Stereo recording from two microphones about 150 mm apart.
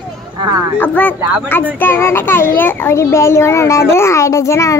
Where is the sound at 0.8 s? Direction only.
10° left (ahead or behind).